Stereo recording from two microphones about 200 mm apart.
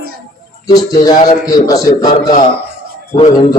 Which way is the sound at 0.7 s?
20° left (ahead or behind).